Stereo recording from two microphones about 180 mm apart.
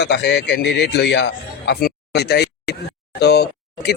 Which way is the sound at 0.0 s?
75° left (ahead or behind).